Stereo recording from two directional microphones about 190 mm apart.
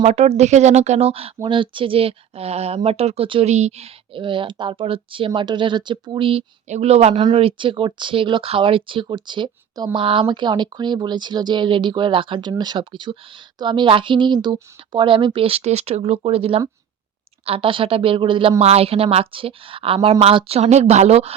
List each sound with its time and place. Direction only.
0.0 s speech: 35° right (ahead or behind)